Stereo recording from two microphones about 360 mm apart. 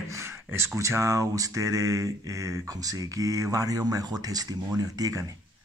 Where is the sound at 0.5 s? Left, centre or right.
Centre.